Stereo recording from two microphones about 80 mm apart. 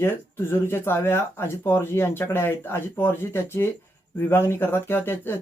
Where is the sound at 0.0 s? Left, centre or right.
Left.